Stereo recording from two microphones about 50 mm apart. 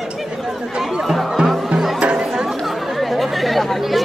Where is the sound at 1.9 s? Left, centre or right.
Centre.